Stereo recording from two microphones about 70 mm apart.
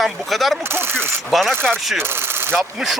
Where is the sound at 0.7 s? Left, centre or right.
Right.